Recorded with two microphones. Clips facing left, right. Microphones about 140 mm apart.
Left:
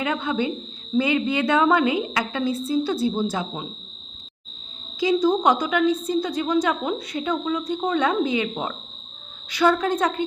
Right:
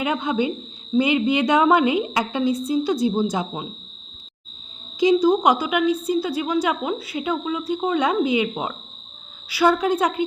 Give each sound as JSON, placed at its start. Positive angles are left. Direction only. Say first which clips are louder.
{"t": 0.0, "sound": "a woman's voice", "louder": "right 2 dB", "side_deg": -15}
{"t": 4.9, "sound": "a woman's voice", "louder": "right 3 dB", "side_deg": -15}